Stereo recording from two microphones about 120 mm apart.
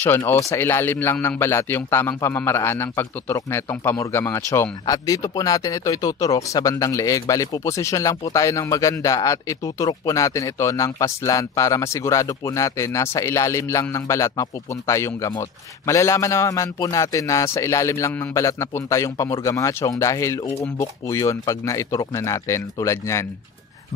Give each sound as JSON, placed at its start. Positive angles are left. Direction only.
{"t": 0.3, "sound": "a man's voice", "side_deg": 20}